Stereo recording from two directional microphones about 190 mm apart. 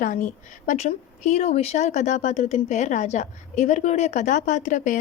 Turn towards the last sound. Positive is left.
turn(degrees=40)  # may be behind; listen again after turning